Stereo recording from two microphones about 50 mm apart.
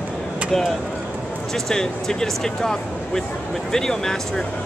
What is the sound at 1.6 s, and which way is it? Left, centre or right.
Speech, centre.